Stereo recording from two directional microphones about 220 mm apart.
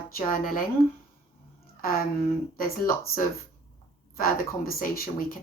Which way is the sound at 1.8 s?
40° left (ahead or behind).